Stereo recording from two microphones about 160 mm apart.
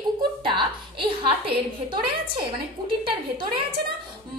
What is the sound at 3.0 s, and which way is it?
Speech, 30° right (ahead or behind).